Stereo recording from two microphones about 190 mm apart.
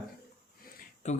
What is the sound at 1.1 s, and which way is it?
Speech, 35° left (ahead or behind).